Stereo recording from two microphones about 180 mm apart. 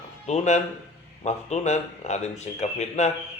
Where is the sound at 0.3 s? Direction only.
40° left (ahead or behind).